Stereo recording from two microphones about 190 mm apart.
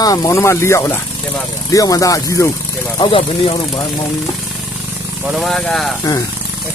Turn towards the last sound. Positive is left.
turn(degrees=0)  # may be behind; listen again after turning